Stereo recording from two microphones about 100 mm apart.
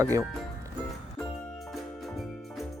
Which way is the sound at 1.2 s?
10° left (ahead or behind).